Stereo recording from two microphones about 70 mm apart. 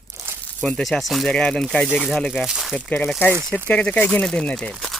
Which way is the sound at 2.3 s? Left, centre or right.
Centre.